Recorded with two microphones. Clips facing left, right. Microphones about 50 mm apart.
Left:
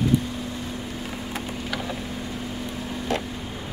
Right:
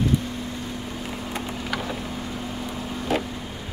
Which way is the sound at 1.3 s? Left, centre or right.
Centre.